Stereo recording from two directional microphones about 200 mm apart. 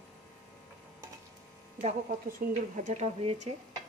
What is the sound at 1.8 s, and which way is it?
A woman's voice, 35° right (ahead or behind).